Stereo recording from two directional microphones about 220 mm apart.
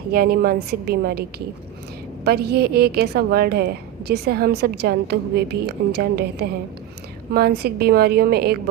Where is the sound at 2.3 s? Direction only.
45° right (ahead or behind).